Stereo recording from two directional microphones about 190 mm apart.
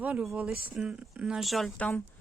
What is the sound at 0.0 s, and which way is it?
Speech, 5° right (ahead or behind).